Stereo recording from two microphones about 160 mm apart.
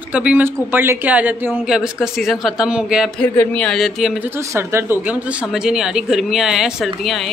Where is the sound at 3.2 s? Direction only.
5° left (ahead or behind).